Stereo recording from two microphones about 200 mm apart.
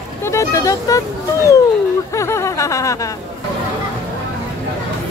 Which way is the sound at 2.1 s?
15° left (ahead or behind).